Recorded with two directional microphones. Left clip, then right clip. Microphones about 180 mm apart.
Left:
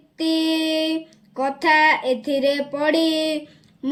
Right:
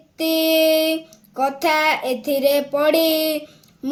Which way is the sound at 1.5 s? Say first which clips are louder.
Left 4 dB; 20° right (ahead or behind).